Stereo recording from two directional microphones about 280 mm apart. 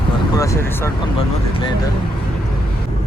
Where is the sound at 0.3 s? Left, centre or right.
Centre.